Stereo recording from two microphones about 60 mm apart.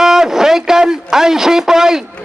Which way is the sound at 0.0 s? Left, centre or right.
Centre.